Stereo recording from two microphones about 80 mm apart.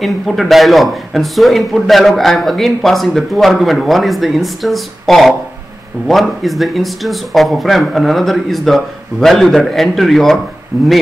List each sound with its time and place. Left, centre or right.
0.0 s speech: centre
10.7 s speech: right